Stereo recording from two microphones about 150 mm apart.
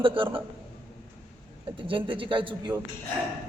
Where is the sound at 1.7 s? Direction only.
35° right (ahead or behind).